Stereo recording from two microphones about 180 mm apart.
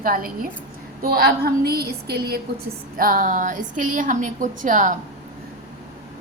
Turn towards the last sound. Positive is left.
turn(degrees=-45)  # may be behind; listen again after turning